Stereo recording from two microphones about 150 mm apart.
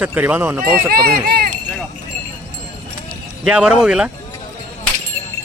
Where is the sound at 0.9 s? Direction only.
90° right.